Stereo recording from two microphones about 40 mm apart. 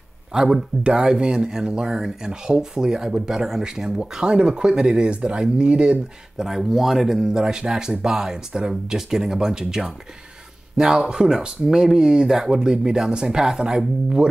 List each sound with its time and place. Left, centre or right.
0.3 s speech: centre; by 5.9 s right
6.3 s speech: centre